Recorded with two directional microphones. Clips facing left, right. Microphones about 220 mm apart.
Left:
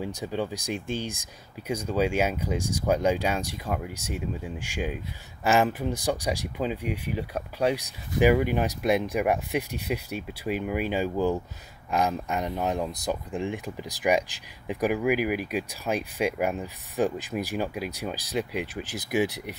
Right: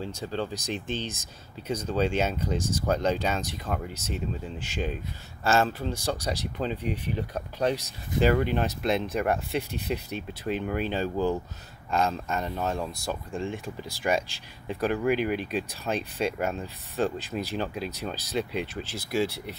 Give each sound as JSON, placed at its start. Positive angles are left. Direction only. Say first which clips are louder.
{"t": 0.0, "sound": "speech", "louder": "left 2 dB", "side_deg": 15}